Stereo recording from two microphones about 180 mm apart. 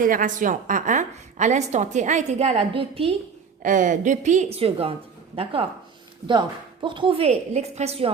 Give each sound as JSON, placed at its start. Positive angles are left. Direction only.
{"t": 0.0, "sound": "a woman's voice", "side_deg": -50}
{"t": 3.6, "sound": "a woman's voice", "side_deg": -45}
{"t": 4.5, "sound": "a woman's voice", "side_deg": -35}
{"t": 6.8, "sound": "a woman's voice", "side_deg": -30}